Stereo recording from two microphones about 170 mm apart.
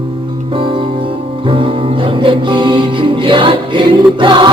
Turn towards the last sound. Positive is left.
turn(degrees=-30)  # may be behind; listen again after turning